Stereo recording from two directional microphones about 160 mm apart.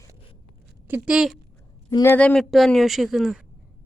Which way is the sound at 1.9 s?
20° left (ahead or behind).